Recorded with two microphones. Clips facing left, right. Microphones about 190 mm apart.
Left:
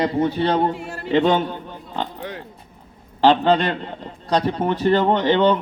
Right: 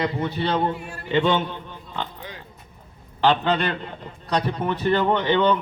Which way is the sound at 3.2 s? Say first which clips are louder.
Left 5 dB; 35° left (ahead or behind).